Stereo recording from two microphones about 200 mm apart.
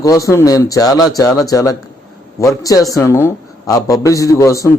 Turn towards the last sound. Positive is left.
turn(degrees=15)  # may be behind; listen again after turning